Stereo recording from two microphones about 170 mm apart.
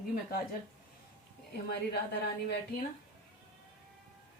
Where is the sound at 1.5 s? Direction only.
75° left (ahead or behind).